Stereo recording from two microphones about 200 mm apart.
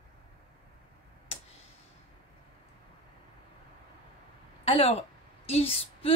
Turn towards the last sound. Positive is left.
turn(degrees=30)  # may be behind; listen again after turning